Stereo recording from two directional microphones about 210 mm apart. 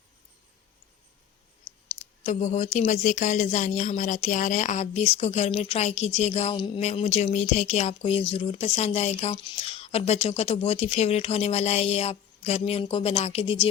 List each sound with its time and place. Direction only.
1.7 s clicking: 15° left (ahead or behind)
2.2 s speech: 35° left (ahead or behind)